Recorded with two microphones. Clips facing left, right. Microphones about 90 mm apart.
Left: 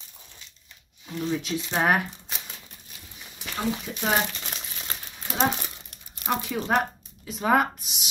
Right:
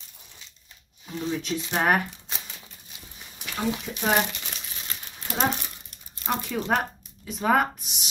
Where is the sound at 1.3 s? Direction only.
Centre (ahead or behind).